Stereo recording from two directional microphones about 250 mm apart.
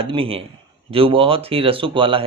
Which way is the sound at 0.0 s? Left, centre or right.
Right.